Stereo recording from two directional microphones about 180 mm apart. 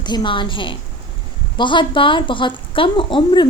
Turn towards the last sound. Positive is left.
turn(degrees=30)  # may be behind; listen again after turning